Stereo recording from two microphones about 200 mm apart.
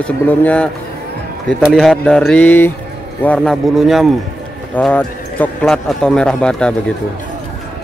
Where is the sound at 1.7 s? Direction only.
Centre (ahead or behind).